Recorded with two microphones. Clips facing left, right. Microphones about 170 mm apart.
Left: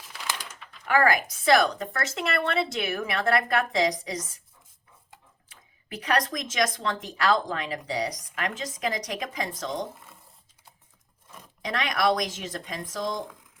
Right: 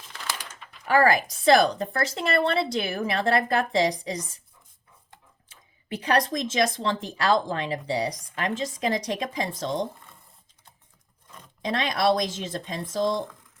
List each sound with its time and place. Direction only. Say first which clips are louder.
0.9 s a woman's voice: right 2 dB; 35° right (ahead or behind)
5.5 s speech: right 6 dB; 30° right (ahead or behind)
11.6 s speech: right 2 dB; 30° right (ahead or behind)